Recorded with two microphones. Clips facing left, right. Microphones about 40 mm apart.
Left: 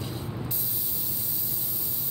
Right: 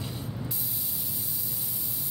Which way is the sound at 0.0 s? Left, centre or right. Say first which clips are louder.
Left 2 dB; centre.